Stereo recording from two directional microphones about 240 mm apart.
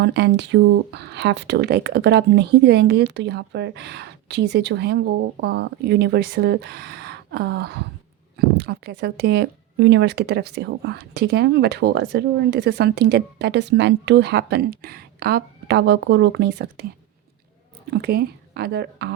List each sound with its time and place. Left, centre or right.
0.0 s speech: right
17.9 s speech: right